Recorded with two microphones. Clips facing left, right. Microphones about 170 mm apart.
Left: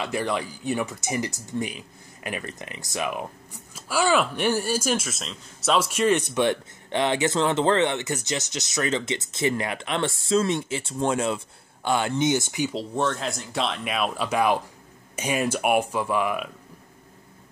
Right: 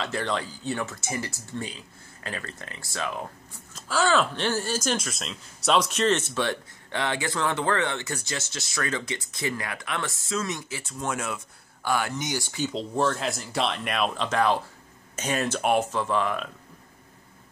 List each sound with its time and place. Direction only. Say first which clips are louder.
0.0 s speech: left 2 dB; 10° left (ahead or behind)
12.7 s speech: right 3 dB; centre (ahead or behind)